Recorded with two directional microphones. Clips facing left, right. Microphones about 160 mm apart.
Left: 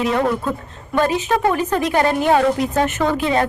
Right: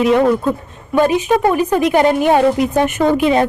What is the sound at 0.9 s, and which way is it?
A woman's voice, 15° right (ahead or behind).